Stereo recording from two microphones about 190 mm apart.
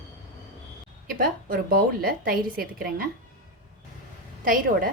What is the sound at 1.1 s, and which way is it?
Speech, 50° right (ahead or behind).